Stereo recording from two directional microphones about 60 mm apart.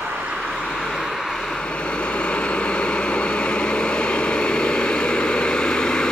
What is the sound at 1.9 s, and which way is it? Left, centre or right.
Vehicle, centre.